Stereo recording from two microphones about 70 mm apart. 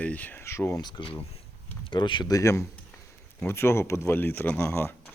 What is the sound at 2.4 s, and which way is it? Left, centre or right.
Speech, left.